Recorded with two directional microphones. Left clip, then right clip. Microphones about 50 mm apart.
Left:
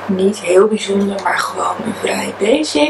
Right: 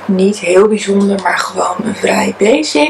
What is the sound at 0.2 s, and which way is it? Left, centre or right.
Speech, right.